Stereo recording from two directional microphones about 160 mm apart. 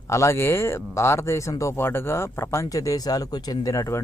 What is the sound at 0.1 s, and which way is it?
Speech, 15° left (ahead or behind).